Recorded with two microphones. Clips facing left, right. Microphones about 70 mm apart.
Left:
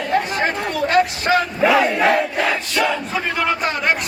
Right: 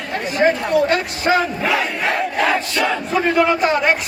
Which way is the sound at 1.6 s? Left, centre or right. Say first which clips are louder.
Left 4 dB; centre.